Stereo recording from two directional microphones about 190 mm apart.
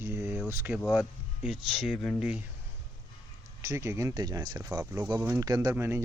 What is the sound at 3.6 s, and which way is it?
Speech, 15° right (ahead or behind).